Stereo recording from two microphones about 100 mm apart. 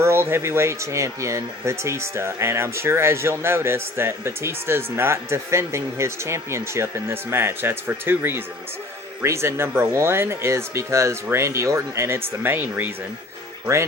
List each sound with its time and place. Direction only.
0.0 s speech: 25° right (ahead or behind)